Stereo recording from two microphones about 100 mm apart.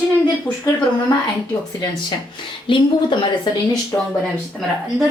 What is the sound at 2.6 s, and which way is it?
Speech, 55° left (ahead or behind).